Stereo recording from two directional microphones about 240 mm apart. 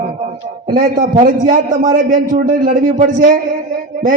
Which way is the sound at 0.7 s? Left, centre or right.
Right.